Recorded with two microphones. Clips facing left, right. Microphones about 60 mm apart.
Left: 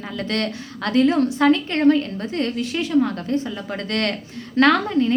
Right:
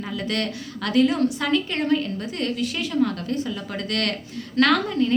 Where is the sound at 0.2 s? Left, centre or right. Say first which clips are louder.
Left 4 dB; left.